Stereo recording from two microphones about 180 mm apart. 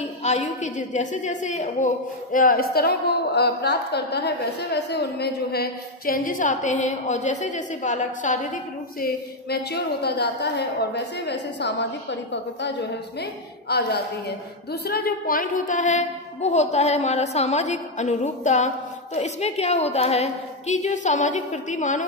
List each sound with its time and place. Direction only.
0.2 s a woman's voice: 40° left (ahead or behind)
2.3 s a woman's voice: 55° left (ahead or behind)
9.0 s a woman's voice: 60° left (ahead or behind); by 12.7 s 80° left
13.2 s a woman's voice: 65° left (ahead or behind); by 22.0 s 45° left (ahead or behind)